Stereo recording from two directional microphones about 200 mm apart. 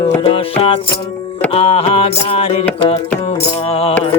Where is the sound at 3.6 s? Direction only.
30° left (ahead or behind).